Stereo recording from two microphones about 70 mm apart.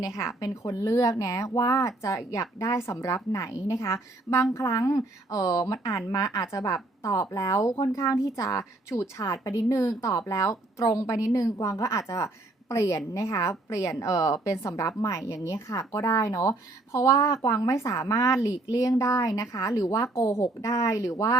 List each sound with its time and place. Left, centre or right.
0.2 s speech: left